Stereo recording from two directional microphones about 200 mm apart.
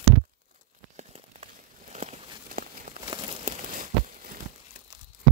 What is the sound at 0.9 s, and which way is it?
Crumpling, 30° right (ahead or behind).